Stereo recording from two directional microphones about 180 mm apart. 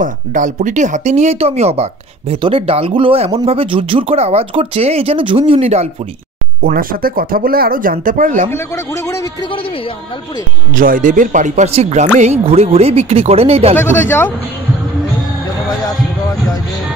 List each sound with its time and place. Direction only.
0.0 s speech: 45° right (ahead or behind)
6.6 s speech: 55° right (ahead or behind)
8.5 s a man's voice: 15° left (ahead or behind)
10.7 s speech: 50° right (ahead or behind)
13.7 s a man's voice: 10° left (ahead or behind)